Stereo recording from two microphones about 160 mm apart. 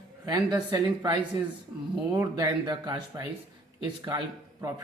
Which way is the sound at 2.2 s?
20° right (ahead or behind).